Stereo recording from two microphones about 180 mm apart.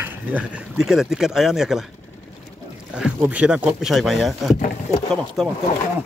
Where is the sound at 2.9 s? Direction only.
10° right (ahead or behind).